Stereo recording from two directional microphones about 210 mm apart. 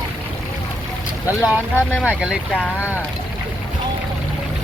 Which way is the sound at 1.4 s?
5° left (ahead or behind).